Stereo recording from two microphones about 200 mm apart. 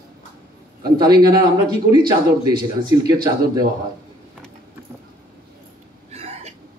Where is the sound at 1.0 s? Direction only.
20° right (ahead or behind).